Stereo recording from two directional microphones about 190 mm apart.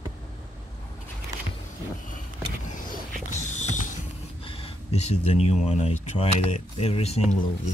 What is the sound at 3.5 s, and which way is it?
Creak, 40° left (ahead or behind).